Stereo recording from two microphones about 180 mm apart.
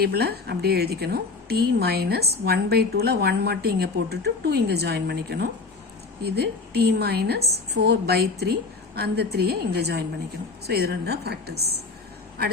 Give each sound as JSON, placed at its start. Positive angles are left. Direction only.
{"t": 0.0, "sound": "a woman's voice", "side_deg": -60}